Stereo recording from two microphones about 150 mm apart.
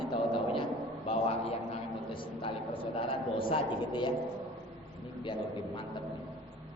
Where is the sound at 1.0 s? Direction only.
40° left (ahead or behind).